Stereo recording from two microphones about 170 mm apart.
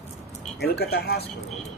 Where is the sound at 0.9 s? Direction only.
70° left (ahead or behind).